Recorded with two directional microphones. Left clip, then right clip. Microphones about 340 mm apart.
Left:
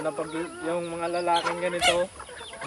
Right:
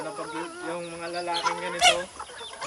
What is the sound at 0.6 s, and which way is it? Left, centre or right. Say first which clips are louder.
Speech: left 5 dB; centre.